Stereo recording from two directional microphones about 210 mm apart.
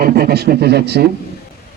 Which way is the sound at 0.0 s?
50° right (ahead or behind).